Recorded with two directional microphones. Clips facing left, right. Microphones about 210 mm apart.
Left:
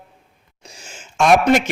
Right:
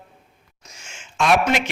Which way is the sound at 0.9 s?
40° left (ahead or behind).